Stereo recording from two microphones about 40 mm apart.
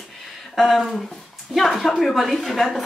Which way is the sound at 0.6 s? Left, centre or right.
Centre.